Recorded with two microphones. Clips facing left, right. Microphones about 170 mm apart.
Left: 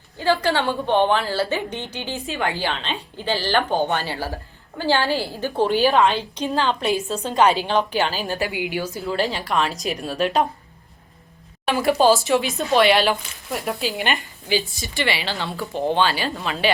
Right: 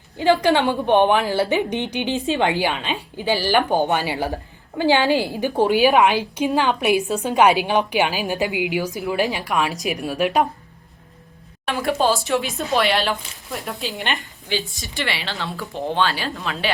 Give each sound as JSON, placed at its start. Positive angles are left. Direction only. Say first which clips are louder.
{"t": 0.2, "sound": "a woman's voice", "louder": "right 4 dB", "side_deg": -15}
{"t": 11.6, "sound": "speech", "louder": "left 3 dB", "side_deg": 5}